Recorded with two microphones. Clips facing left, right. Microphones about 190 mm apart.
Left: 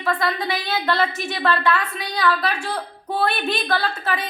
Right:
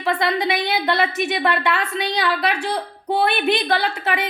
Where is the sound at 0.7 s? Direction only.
15° right (ahead or behind).